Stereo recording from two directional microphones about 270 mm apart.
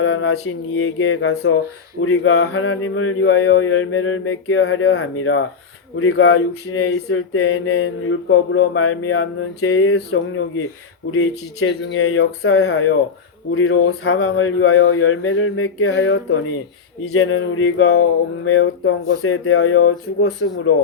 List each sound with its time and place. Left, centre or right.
0.0 s speech: left